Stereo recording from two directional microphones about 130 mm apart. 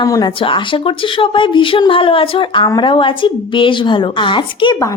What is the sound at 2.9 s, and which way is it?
A woman's voice, 40° left (ahead or behind).